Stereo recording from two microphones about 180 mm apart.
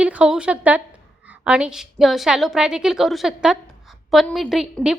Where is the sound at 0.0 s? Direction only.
5° right (ahead or behind).